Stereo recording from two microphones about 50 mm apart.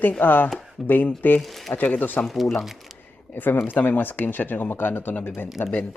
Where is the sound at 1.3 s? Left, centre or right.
Centre.